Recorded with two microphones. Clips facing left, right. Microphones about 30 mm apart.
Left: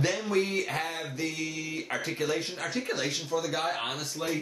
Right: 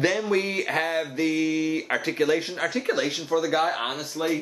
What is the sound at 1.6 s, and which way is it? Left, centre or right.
Speech, right.